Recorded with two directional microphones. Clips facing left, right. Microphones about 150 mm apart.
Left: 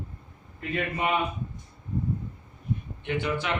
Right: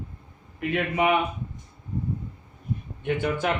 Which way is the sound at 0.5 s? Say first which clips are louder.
Right 5 dB; 75° right (ahead or behind).